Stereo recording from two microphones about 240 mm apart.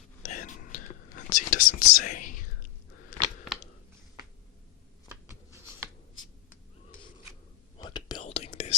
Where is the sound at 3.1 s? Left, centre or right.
Left.